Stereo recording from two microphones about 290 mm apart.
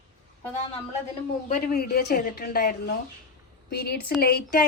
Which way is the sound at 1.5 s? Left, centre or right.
Left.